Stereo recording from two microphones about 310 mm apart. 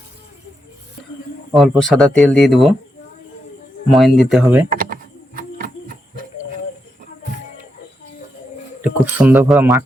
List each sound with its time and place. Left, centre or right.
1.5 s speech: centre
3.9 s speech: centre
4.7 s a sound: right
8.8 s speech: centre